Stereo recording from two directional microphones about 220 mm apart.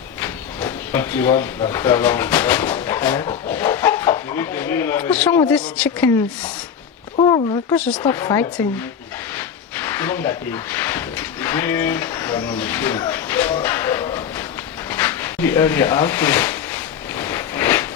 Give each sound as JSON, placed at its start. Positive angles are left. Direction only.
{"t": 0.2, "sound": "sliding door", "side_deg": 10}
{"t": 1.7, "sound": "speech", "side_deg": 10}
{"t": 3.5, "sound": "chicken", "side_deg": 10}
{"t": 5.5, "sound": "speech", "side_deg": 5}
{"t": 7.2, "sound": "a sound", "side_deg": 20}
{"t": 7.8, "sound": "speech", "side_deg": 5}
{"t": 9.7, "sound": "speech", "side_deg": 10}
{"t": 12.5, "sound": "a sound", "side_deg": 10}